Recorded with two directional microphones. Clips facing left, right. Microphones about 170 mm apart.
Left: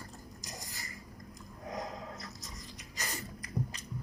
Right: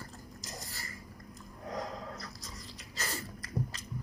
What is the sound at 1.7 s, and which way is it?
Dog, 20° left (ahead or behind).